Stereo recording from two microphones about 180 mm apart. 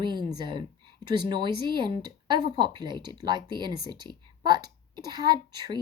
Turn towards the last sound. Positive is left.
turn(degrees=-25)  # may be behind; listen again after turning